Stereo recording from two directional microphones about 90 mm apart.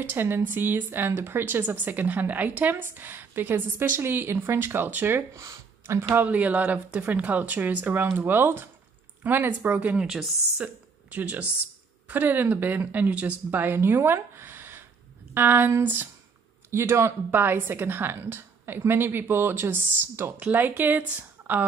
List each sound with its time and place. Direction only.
0.0 s a woman's voice: 25° right (ahead or behind)
5.4 s a sound: 35° right (ahead or behind)
6.1 s a woman's voice: 15° right (ahead or behind)
10.0 s a woman's voice: 5° right (ahead or behind)
10.6 s a woman's voice: 15° right (ahead or behind)